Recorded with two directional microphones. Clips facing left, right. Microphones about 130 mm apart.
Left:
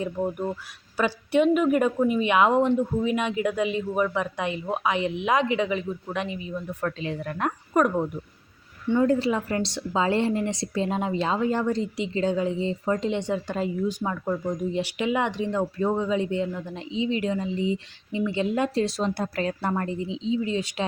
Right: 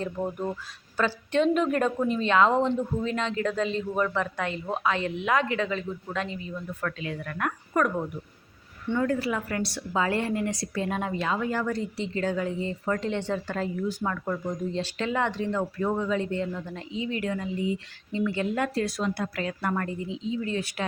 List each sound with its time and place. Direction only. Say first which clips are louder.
0.0 s a woman's voice: left 3 dB; 10° left (ahead or behind)